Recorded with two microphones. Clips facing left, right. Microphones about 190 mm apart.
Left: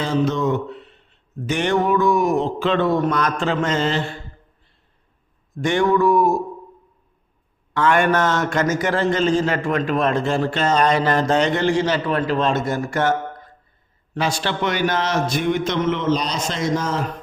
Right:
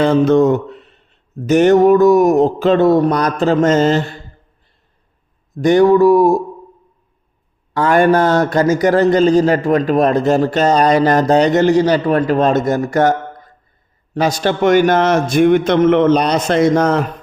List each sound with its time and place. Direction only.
0.0 s speech: 55° right (ahead or behind)
1.5 s a sound: 45° right (ahead or behind)
5.5 s a man's voice: 40° right (ahead or behind)
7.7 s a man's voice: 35° right (ahead or behind); by 17.1 s 60° right (ahead or behind)